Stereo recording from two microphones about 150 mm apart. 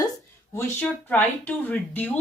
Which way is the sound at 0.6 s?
10° left (ahead or behind).